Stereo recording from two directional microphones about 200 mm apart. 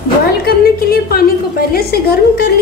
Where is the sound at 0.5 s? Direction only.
50° left (ahead or behind).